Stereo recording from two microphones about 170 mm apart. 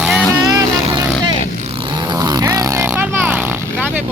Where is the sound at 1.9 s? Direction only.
25° right (ahead or behind).